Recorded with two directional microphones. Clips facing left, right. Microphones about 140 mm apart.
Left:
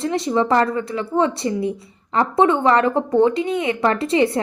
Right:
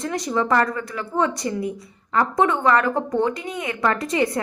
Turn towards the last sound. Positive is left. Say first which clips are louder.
# left 4 dB
turn(degrees=25)  # may be behind; listen again after turning